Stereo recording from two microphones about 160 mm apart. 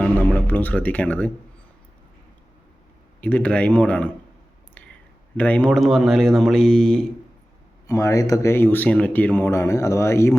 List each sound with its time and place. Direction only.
0.0 s speech: 10° left (ahead or behind)
3.2 s speech: 10° left (ahead or behind)
5.4 s speech: 10° left (ahead or behind)
7.9 s speech: 20° left (ahead or behind)